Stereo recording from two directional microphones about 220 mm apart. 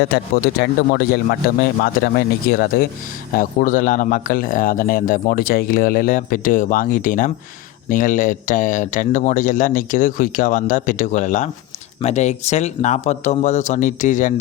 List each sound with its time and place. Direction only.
0.1 s speech: 45° left (ahead or behind)